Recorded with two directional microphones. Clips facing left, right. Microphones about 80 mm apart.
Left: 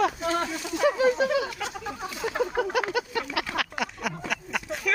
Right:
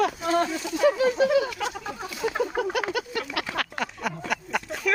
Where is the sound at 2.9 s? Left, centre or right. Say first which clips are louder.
Left 1 dB; left.